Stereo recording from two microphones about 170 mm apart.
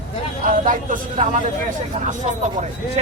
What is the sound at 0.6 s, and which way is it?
Speech, 50° right (ahead or behind).